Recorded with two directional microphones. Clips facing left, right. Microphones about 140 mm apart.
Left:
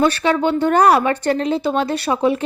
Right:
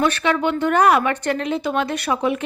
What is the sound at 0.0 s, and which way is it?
A woman's voice, 35° left (ahead or behind).